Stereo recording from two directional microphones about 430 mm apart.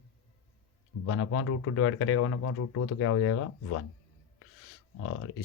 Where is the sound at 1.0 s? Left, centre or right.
Left.